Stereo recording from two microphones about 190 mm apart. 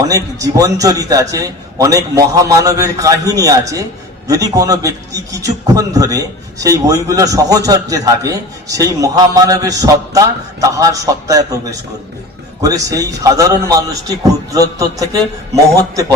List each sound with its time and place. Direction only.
0.0 s a man's voice: 20° right (ahead or behind)